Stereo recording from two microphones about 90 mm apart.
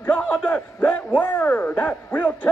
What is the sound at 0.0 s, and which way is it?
A man's voice, 15° left (ahead or behind).